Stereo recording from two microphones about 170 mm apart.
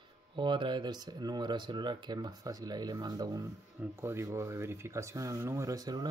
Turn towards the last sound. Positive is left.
turn(degrees=-20)  # may be behind; listen again after turning